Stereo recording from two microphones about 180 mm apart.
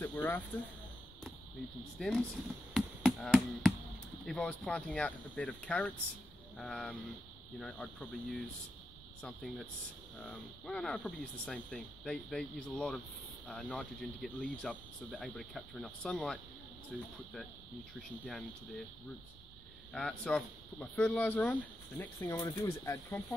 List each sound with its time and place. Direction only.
0.0 s a sound: 10° left (ahead or behind)
2.0 s speech: centre (ahead or behind)
2.7 s chop: centre (ahead or behind)
4.3 s speech: 5° left (ahead or behind)
19.9 s speech: 5° left (ahead or behind)